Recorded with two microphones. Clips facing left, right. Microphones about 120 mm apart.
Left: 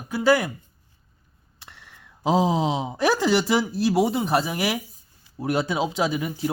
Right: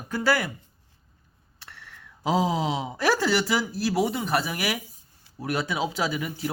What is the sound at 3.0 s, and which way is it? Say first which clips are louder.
Speech: left 3 dB; 15° left (ahead or behind).